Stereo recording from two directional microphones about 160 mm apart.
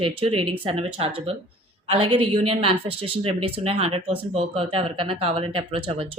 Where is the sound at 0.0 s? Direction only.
35° right (ahead or behind).